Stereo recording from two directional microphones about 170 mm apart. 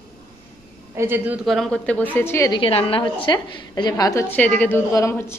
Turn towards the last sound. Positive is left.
turn(degrees=15)  # may be behind; listen again after turning